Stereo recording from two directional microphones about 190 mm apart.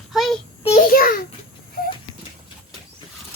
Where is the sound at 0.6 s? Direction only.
45° left (ahead or behind).